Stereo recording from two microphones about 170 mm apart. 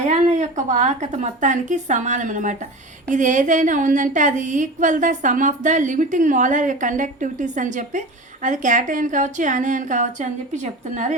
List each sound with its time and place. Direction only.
0.1 s a woman's voice: 45° right (ahead or behind)